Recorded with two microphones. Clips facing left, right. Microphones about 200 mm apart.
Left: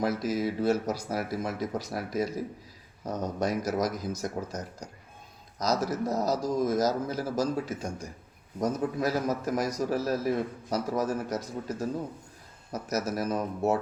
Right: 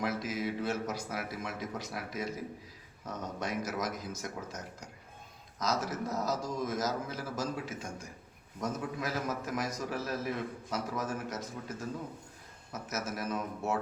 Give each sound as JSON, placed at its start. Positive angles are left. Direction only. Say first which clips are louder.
{"t": 0.0, "sound": "a man's voice", "louder": "left 6 dB", "side_deg": 40}